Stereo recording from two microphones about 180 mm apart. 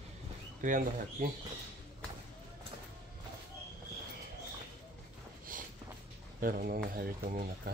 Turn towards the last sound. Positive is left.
turn(degrees=-55)  # may be behind; listen again after turning